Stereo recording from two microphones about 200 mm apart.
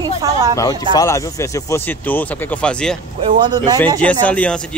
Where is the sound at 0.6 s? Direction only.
20° left (ahead or behind).